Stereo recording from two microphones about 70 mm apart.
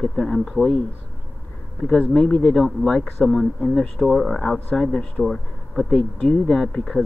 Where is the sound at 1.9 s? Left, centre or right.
Centre.